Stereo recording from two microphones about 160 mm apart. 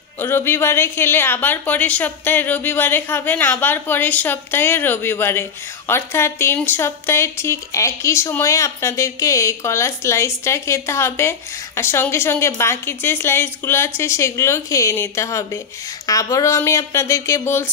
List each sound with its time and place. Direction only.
0.2 s a woman's voice: 15° left (ahead or behind)